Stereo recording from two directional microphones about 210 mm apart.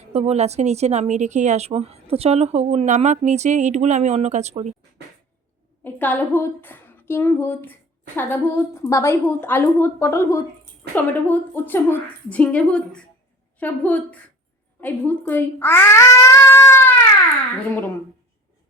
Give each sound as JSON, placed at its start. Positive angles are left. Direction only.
{"t": 0.1, "sound": "a woman's voice", "side_deg": -30}
{"t": 5.8, "sound": "a woman's voice", "side_deg": 10}
{"t": 16.5, "sound": "cat", "side_deg": 10}